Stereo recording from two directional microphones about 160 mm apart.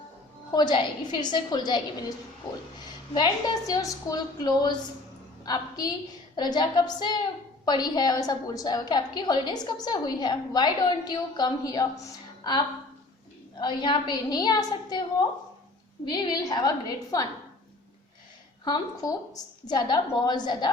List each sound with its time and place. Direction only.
0.5 s a woman's voice: 30° left (ahead or behind)
18.6 s a woman's voice: 25° left (ahead or behind)